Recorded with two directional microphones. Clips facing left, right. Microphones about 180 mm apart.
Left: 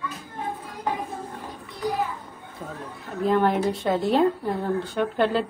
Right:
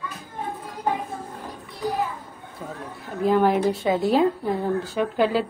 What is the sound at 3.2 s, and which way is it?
A woman's voice, centre (ahead or behind).